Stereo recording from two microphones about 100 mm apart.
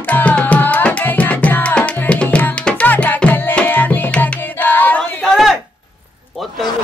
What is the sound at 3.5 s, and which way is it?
Tabla, 20° left (ahead or behind).